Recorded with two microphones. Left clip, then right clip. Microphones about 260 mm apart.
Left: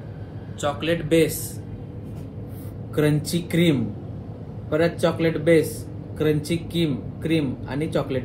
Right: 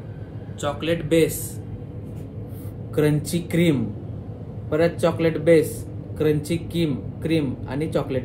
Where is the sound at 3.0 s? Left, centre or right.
Right.